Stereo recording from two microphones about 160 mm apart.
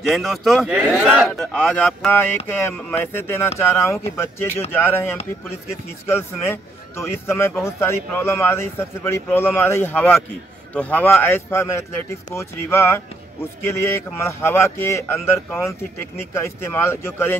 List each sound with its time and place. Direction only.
0.1 s a man's voice: centre (ahead or behind)
2.0 s a man's voice: 15° left (ahead or behind)